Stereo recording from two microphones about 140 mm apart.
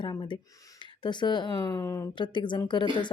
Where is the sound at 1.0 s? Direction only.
30° left (ahead or behind).